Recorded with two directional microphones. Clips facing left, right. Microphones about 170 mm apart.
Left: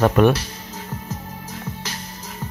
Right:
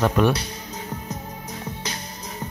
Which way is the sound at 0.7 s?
15° right (ahead or behind).